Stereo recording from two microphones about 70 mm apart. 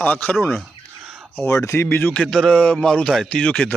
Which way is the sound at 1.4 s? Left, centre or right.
Left.